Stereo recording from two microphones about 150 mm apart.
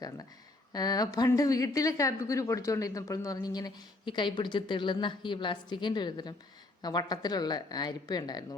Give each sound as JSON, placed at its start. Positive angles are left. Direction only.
{"t": 0.7, "sound": "a woman's voice", "side_deg": 25}